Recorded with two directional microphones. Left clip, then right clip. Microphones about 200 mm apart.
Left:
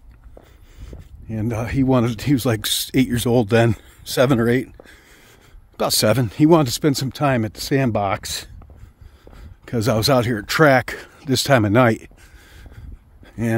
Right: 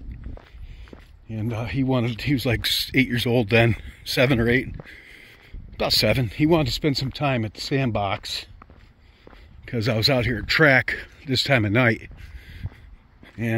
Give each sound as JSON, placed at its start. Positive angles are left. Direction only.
{"t": 0.8, "sound": "speech", "side_deg": 50}
{"t": 5.8, "sound": "speech", "side_deg": 30}
{"t": 9.7, "sound": "speech", "side_deg": 35}